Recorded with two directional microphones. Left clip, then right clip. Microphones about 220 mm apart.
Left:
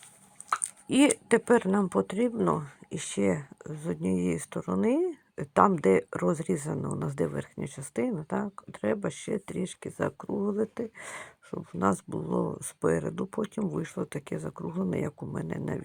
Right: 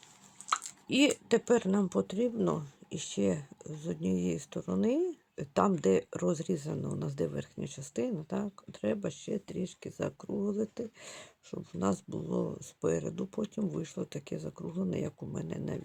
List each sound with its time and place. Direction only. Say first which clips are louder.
0.9 s speech: left 4 dB; 15° left (ahead or behind)